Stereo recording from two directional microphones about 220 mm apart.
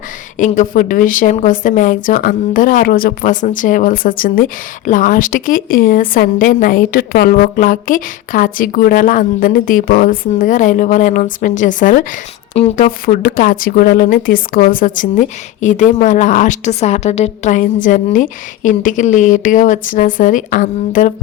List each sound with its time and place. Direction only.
0.3 s a woman's voice: 35° left (ahead or behind)